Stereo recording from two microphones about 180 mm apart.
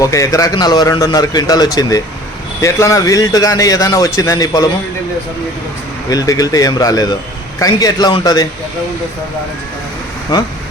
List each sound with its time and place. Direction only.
0.0 s a man's voice: 20° left (ahead or behind)
6.1 s a man's voice: 20° left (ahead or behind)